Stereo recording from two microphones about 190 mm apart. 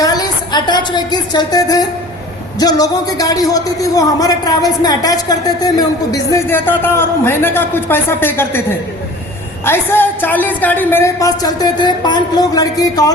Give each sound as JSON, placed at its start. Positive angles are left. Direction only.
{"t": 0.0, "sound": "a sound", "side_deg": 20}
{"t": 2.6, "sound": "a man's voice", "side_deg": 20}
{"t": 9.6, "sound": "speech", "side_deg": 10}